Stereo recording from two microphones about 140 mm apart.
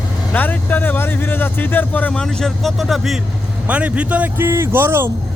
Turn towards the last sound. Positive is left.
turn(degrees=-15)  # may be behind; listen again after turning